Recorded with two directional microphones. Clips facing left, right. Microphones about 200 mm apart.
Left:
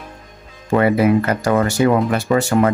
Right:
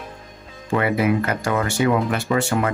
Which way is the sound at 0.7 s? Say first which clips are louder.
Left 5 dB; 40° left (ahead or behind).